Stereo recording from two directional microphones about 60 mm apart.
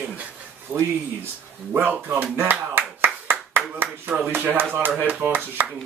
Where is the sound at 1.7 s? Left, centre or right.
Right.